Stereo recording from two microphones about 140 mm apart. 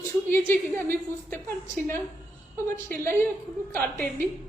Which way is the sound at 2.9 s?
15° left (ahead or behind).